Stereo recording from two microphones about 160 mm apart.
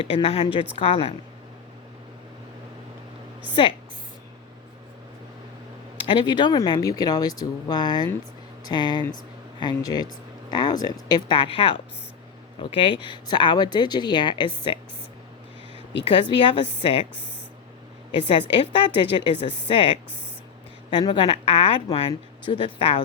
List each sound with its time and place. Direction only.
0.0 s speech: 35° left (ahead or behind)
3.5 s speech: 30° left (ahead or behind)
6.0 s speech: 30° left (ahead or behind)
16.2 s speech: 35° left (ahead or behind)
18.2 s speech: 35° left (ahead or behind)